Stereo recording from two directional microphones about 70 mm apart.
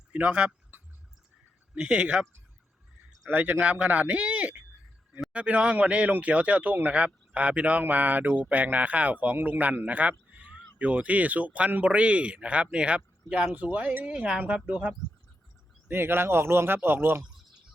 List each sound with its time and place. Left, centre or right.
0.1 s speech: centre
1.7 s speech: centre
3.2 s speech: right
15.9 s speech: right